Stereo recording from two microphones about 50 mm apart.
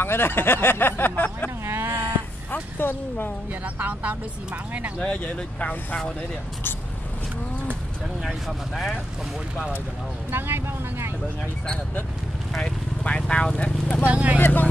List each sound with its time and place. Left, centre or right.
0.0 s speech: left
1.7 s a sound: right
2.5 s speech: left
3.6 s speech: right
5.0 s speech: left
8.2 s speech: centre
10.3 s speech: right
13.0 s speech: left
14.0 s speech: right
14.4 s speech: left